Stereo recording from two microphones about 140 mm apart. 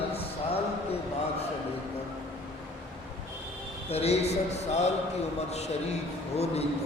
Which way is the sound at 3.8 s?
50° left (ahead or behind).